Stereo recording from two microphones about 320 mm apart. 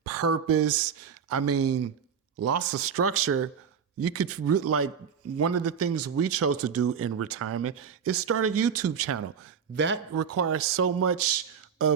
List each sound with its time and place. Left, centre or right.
0.0 s speech: right
9.7 s speech: right
10.2 s speech: right